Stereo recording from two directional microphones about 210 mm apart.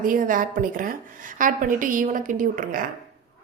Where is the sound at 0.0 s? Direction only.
40° right (ahead or behind).